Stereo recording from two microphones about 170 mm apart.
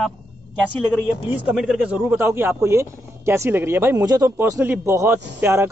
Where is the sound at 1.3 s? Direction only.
5° right (ahead or behind).